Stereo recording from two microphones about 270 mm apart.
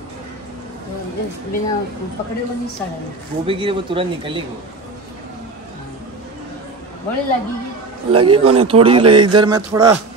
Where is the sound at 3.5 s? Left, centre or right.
Centre.